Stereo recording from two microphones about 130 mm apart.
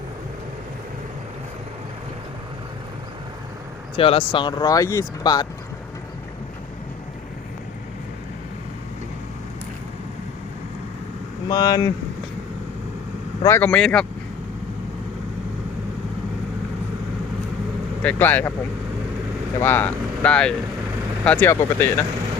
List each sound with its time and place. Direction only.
3.9 s speech: 45° left (ahead or behind)
11.4 s speech: 30° left (ahead or behind)
13.4 s speech: 20° left (ahead or behind)
13.7 s speech: 5° left (ahead or behind)
18.0 s speech: 10° left (ahead or behind)
19.6 s speech: 15° left (ahead or behind)